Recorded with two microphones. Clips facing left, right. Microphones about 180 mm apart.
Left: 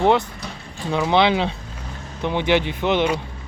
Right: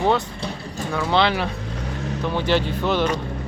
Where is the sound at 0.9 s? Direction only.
20° left (ahead or behind).